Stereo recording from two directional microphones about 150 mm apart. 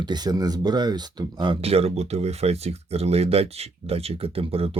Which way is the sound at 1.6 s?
40° right (ahead or behind).